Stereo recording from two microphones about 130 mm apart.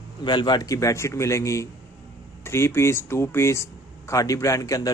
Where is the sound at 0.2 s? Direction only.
35° left (ahead or behind).